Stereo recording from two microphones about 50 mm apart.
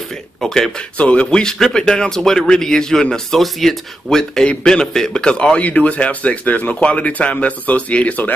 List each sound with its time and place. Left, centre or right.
0.4 s speech: centre
0.9 s a man's voice: left